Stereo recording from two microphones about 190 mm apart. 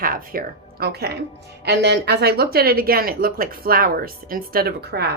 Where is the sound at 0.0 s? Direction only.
50° right (ahead or behind).